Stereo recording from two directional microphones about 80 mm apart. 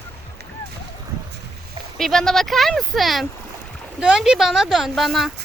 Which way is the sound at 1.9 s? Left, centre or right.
Centre.